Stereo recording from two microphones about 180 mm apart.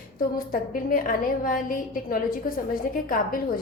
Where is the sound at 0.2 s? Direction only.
50° left (ahead or behind).